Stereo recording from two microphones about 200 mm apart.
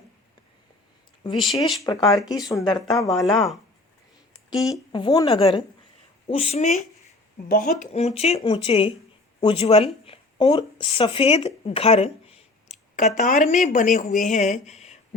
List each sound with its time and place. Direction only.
1.8 s speech: 20° left (ahead or behind)
3.1 s speech: centre (ahead or behind)
4.7 s speech: 20° left (ahead or behind)